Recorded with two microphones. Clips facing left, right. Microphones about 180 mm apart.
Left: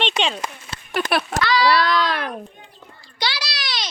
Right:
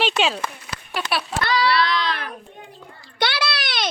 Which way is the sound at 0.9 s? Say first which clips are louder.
Left 4 dB; 50° left (ahead or behind).